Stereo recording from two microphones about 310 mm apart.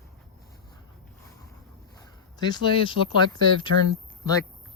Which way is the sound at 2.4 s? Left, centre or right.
Centre.